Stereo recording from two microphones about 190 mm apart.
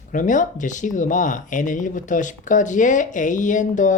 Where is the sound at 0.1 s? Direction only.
40° left (ahead or behind).